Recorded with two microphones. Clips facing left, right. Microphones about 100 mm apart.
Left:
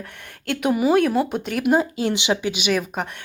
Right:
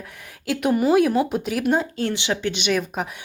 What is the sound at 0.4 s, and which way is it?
Speech, centre (ahead or behind).